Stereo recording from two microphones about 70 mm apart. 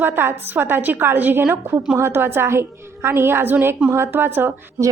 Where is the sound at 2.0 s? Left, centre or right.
Right.